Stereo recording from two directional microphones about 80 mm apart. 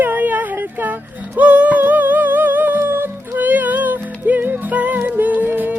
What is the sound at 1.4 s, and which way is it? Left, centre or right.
Music, centre.